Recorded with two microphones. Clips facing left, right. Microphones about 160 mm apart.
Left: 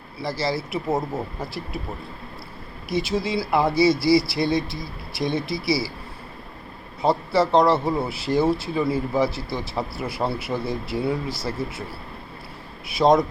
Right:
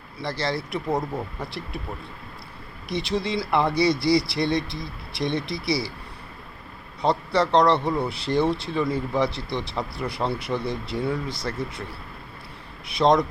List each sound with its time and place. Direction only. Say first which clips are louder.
0.2 s speech: left 2 dB; 5° left (ahead or behind)
2.9 s speech: left 2 dB; 5° left (ahead or behind)
7.0 s speech: left 2 dB; 5° left (ahead or behind)
12.9 s speech: left 2 dB; 5° left (ahead or behind)